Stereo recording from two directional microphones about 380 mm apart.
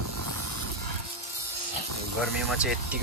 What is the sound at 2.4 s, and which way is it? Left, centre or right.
Speech, centre.